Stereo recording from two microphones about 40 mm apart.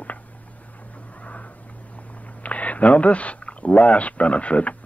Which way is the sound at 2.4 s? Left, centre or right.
Left.